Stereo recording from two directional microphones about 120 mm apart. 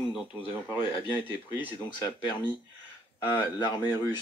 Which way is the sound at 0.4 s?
40° left (ahead or behind).